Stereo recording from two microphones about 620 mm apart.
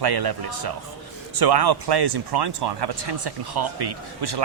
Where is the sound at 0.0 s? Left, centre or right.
Right.